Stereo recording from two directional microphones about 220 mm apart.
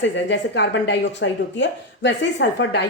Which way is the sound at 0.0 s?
50° left (ahead or behind).